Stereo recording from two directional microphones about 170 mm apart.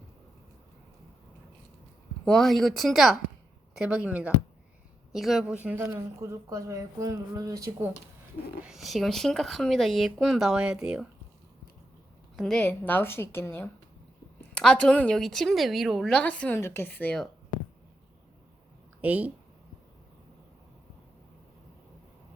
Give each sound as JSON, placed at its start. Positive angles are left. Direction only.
{"t": 2.2, "sound": "a woman's voice", "side_deg": 0}
{"t": 8.6, "sound": "a woman's voice", "side_deg": 0}
{"t": 12.4, "sound": "a woman's voice", "side_deg": 5}
{"t": 19.0, "sound": "a woman's voice", "side_deg": -10}